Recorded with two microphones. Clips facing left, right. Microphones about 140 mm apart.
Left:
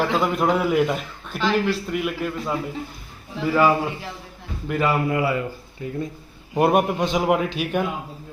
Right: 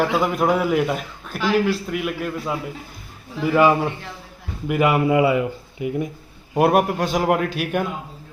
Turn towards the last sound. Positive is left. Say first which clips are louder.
# even
turn(degrees=-5)  # may be behind; listen again after turning